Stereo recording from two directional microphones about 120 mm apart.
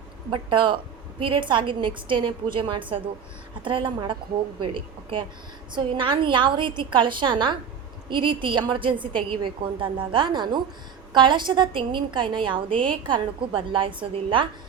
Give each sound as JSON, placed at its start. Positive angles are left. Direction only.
{"t": 0.3, "sound": "a woman's voice", "side_deg": -45}